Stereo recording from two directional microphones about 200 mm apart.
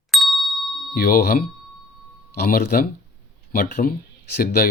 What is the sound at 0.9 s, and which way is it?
Speech, 45° left (ahead or behind).